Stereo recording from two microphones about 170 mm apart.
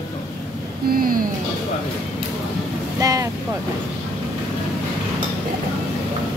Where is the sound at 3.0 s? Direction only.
20° right (ahead or behind).